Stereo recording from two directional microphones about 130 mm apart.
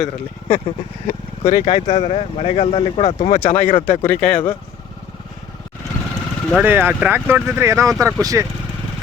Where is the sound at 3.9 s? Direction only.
65° left (ahead or behind).